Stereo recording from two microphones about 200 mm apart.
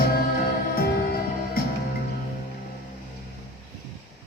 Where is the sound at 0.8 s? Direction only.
50° left (ahead or behind).